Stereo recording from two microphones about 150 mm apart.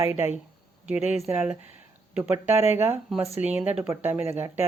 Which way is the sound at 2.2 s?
15° right (ahead or behind).